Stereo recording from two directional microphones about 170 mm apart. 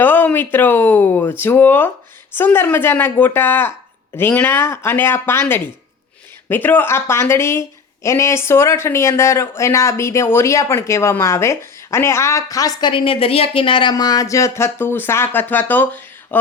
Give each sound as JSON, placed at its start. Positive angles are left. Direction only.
{"t": 0.0, "sound": "speech", "side_deg": 10}